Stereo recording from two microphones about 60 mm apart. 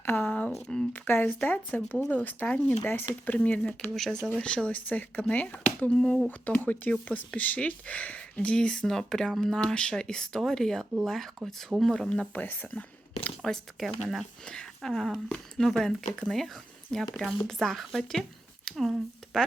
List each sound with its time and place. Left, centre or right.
0.0 s speech: left
0.3 s speech: left
0.9 s speech: left
3.3 s speech: left
3.9 s speech: centre
4.4 s speech: centre
5.9 s speech: centre
6.4 s speech: left
12.3 s speech: left
13.4 s speech: centre
14.4 s a woman's voice: centre
19.2 s a sound: centre